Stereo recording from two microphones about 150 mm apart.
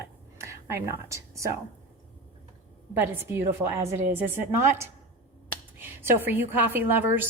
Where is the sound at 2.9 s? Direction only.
15° right (ahead or behind).